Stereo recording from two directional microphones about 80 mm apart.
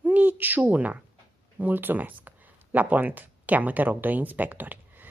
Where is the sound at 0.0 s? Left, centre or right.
Right.